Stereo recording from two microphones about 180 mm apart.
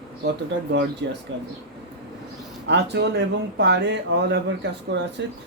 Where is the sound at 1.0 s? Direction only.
75° right (ahead or behind).